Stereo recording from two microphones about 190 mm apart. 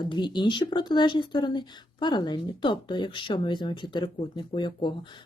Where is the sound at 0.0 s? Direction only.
25° left (ahead or behind).